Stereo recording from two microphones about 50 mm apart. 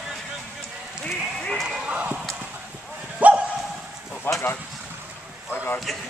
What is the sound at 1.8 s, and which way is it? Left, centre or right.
Basketball bounce, right.